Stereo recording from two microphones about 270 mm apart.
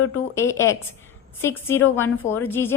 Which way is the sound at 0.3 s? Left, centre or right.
Centre.